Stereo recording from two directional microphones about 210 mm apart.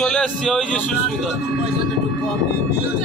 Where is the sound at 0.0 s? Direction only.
Centre (ahead or behind).